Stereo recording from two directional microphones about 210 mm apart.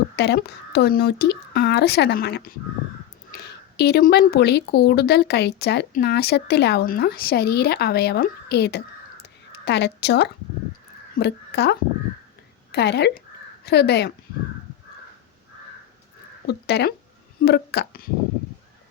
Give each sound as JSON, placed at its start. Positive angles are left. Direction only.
{"t": 0.2, "sound": "a woman's voice", "side_deg": 50}
{"t": 16.5, "sound": "speech", "side_deg": 50}